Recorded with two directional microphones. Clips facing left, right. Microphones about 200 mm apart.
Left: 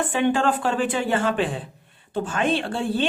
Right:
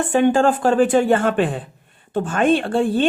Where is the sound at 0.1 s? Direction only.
45° right (ahead or behind).